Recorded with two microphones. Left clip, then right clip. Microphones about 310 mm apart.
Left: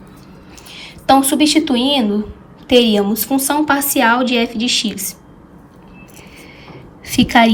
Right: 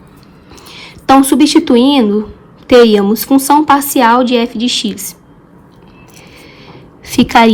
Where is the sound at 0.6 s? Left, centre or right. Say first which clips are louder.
Right 3 dB; centre.